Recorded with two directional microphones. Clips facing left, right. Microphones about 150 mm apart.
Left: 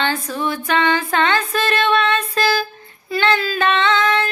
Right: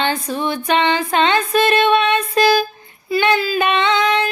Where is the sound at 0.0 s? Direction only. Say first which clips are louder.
Right 1 dB; 20° right (ahead or behind).